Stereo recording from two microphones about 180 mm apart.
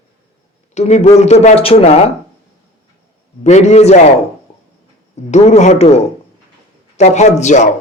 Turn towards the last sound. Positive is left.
turn(degrees=40)  # may be behind; listen again after turning